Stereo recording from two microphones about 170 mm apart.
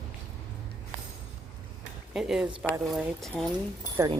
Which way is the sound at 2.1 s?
Centre (ahead or behind).